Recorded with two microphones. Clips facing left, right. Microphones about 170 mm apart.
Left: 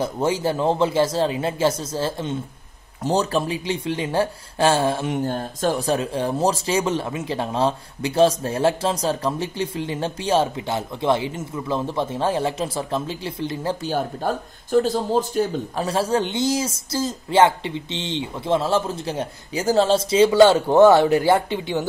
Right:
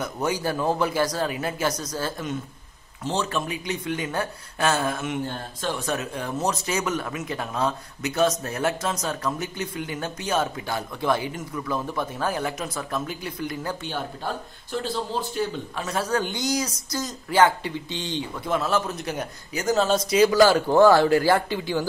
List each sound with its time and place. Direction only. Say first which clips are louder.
0.0 s speech: left 5 dB; 25° left (ahead or behind)
3.0 s speech: left 6 dB; 40° left (ahead or behind)
13.9 s speech: left 7 dB; 45° left (ahead or behind); by 21.8 s 20° left (ahead or behind)